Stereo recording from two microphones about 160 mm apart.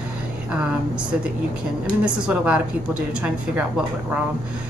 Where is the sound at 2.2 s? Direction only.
5° right (ahead or behind).